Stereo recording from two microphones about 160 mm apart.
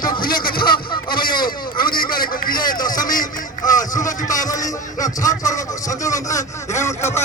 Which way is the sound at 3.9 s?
20° left (ahead or behind).